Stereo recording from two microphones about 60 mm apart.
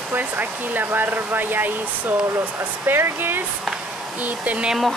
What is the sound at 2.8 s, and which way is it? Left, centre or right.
Hair dryer, right.